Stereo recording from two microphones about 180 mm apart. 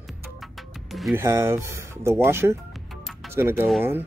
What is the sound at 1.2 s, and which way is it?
Speech, 15° right (ahead or behind).